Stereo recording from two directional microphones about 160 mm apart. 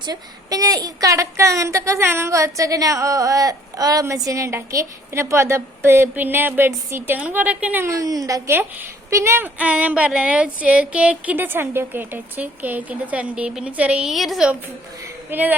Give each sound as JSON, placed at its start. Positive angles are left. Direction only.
{"t": 0.0, "sound": "a woman's voice", "side_deg": -25}